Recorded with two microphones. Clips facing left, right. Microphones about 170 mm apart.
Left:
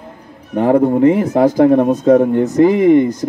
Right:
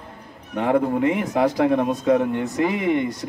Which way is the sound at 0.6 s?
35° left (ahead or behind).